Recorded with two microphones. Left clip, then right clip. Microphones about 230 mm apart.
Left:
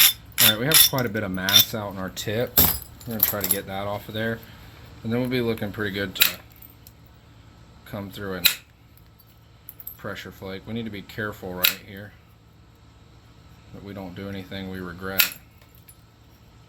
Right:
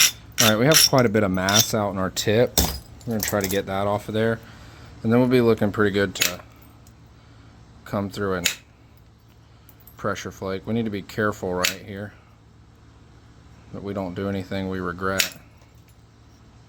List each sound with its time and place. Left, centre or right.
0.0 s mechanisms: centre
0.5 s speech: right
7.9 s speech: right
10.0 s speech: right
13.8 s speech: right